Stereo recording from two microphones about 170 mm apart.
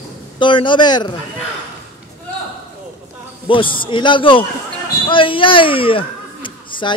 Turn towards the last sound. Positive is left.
turn(degrees=30)  # may be behind; listen again after turning